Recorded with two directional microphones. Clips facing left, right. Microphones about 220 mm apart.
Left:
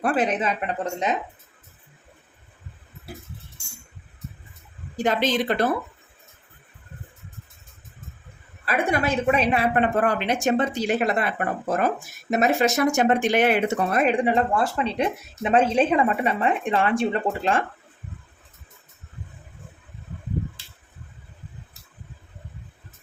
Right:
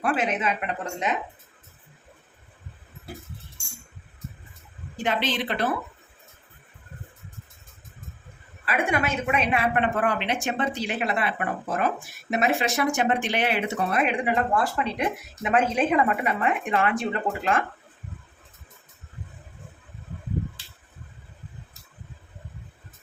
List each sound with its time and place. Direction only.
0.0 s speech: 40° left (ahead or behind)
4.9 s speech: 40° left (ahead or behind)
8.6 s a woman's voice: 40° left (ahead or behind)